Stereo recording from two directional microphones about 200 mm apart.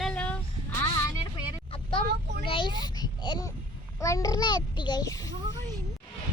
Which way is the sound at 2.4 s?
25° left (ahead or behind).